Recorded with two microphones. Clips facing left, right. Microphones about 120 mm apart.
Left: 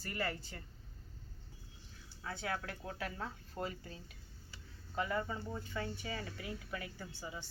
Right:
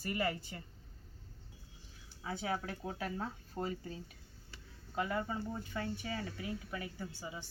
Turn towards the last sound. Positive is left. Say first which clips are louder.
# right 1 dB
turn(degrees=-10)  # may be behind; listen again after turning